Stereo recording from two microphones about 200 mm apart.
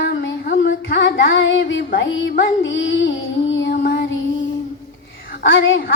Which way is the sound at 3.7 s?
50° left (ahead or behind).